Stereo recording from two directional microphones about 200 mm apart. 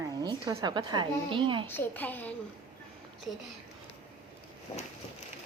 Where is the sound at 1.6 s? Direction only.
10° left (ahead or behind).